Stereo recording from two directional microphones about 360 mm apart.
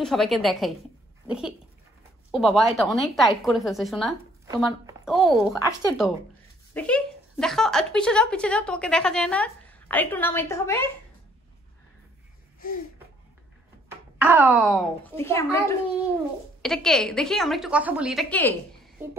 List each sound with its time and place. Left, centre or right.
0.0 s speech: centre
12.5 s a sound: left
14.1 s speech: centre
16.6 s speech: centre